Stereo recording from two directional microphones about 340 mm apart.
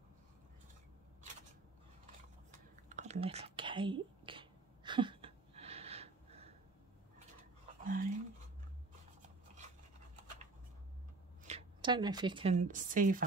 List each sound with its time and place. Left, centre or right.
2.5 s whispering: right
7.8 s a sound: right
11.4 s speech: centre